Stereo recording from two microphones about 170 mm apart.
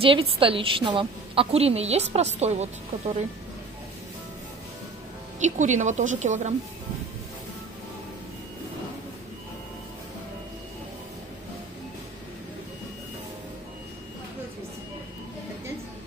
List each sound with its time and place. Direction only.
0.0 s a woman's voice: 30° right (ahead or behind)
5.4 s a woman's voice: 45° right (ahead or behind)